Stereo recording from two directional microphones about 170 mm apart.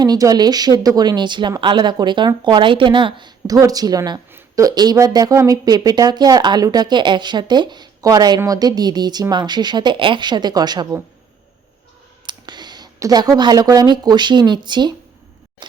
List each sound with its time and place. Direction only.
0.0 s speech: 20° right (ahead or behind)
12.2 s speech: 25° right (ahead or behind)